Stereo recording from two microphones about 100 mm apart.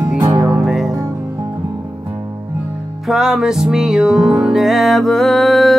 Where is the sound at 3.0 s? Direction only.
5° right (ahead or behind).